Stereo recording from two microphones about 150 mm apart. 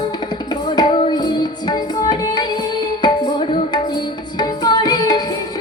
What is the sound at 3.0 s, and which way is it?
Tabla, 30° left (ahead or behind).